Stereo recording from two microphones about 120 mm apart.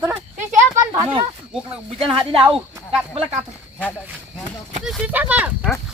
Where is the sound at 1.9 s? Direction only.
50° right (ahead or behind).